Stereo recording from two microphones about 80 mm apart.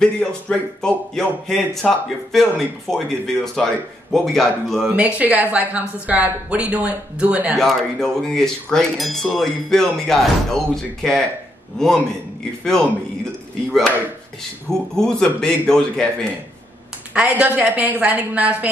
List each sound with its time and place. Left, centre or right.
0.0 s speech: centre
4.8 s a woman's voice: centre
7.5 s speech: centre
13.7 s a man's voice: centre
17.1 s a woman's voice: centre